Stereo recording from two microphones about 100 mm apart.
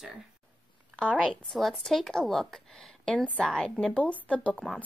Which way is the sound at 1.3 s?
5° left (ahead or behind).